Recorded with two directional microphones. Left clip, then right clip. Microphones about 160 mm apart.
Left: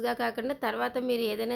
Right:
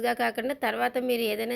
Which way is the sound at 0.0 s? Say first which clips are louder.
Right 3 dB; 15° right (ahead or behind).